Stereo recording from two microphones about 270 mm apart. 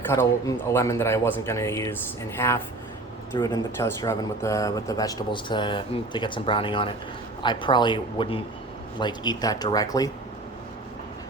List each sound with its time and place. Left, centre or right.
0.1 s speech: centre
3.3 s speech: centre